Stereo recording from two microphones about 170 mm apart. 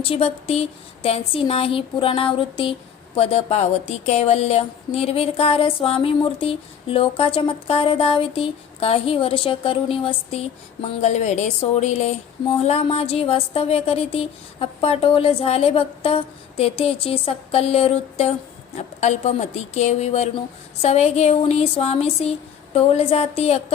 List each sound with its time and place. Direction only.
0.0 s speech: 35° left (ahead or behind)